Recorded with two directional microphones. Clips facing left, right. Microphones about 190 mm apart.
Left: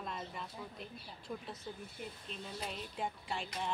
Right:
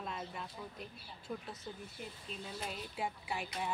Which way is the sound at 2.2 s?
5° right (ahead or behind).